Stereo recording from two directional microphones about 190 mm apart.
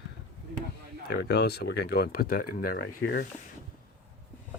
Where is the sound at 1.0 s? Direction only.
60° left (ahead or behind).